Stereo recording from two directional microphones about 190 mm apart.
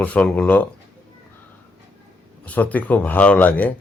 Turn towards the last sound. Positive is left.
turn(degrees=10)  # may be behind; listen again after turning